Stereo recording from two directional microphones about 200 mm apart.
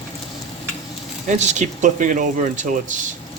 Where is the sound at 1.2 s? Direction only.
35° right (ahead or behind).